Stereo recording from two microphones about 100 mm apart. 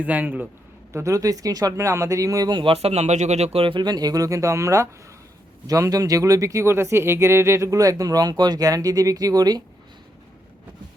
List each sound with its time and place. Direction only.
0.0 s a man's voice: 15° right (ahead or behind)
0.9 s speech: 30° right (ahead or behind)
2.6 s speech: 90° right; by 3.8 s 65° right (ahead or behind)
3.8 s speech: 40° right (ahead or behind)